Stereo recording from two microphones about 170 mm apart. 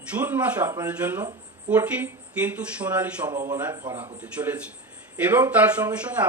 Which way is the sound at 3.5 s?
20° right (ahead or behind).